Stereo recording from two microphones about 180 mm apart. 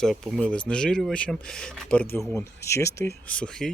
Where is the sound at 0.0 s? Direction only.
Centre (ahead or behind).